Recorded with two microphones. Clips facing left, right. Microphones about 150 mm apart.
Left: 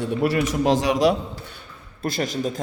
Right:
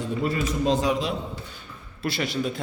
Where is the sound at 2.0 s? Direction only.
45° left (ahead or behind).